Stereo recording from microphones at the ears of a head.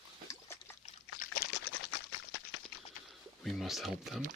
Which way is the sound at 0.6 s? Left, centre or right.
Left.